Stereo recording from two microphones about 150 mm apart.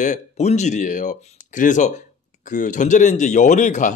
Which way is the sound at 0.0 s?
50° left (ahead or behind).